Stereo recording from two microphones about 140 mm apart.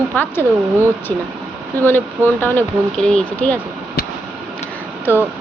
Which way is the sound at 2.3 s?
15° left (ahead or behind).